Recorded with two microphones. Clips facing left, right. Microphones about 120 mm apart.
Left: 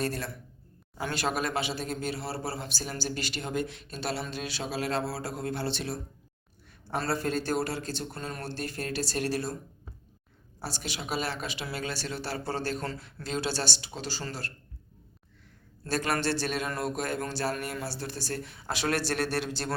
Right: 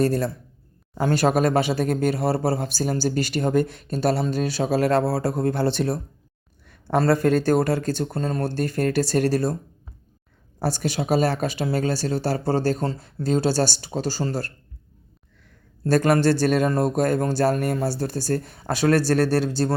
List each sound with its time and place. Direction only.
0.0 s speech: 40° right (ahead or behind)
7.0 s speech: 50° right (ahead or behind)
10.6 s speech: 45° right (ahead or behind)
15.9 s speech: 45° right (ahead or behind)